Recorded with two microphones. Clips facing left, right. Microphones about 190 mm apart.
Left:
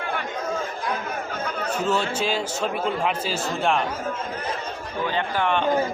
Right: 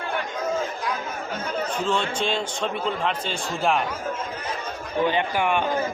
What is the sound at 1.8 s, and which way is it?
A man's voice, 5° left (ahead or behind).